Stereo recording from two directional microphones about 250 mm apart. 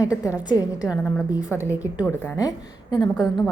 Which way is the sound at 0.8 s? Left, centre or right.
Centre.